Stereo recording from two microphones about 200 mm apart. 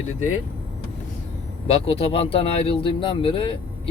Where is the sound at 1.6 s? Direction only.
30° left (ahead or behind).